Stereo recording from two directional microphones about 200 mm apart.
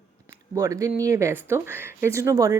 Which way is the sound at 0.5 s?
15° right (ahead or behind).